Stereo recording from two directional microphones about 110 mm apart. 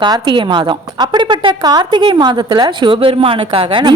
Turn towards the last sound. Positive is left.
turn(degrees=-50)  # may be behind; listen again after turning